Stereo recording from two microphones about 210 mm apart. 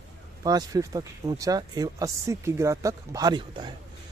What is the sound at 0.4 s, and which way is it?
Speech, 20° right (ahead or behind).